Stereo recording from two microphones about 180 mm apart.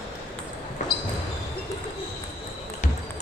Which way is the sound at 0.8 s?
40° left (ahead or behind).